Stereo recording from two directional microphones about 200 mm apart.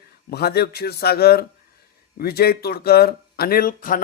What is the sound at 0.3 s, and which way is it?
Speech, 50° left (ahead or behind).